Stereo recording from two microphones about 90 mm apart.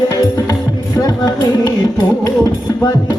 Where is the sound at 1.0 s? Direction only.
50° left (ahead or behind).